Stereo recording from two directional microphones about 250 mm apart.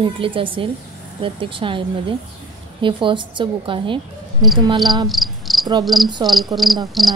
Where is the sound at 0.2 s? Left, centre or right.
Centre.